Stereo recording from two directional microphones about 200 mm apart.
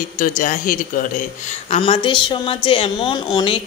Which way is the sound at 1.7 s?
30° left (ahead or behind).